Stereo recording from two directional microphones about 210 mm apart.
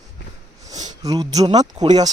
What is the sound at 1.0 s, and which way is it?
Speech, 15° right (ahead or behind).